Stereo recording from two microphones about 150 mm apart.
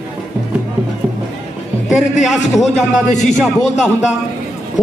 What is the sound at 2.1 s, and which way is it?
Music, centre (ahead or behind).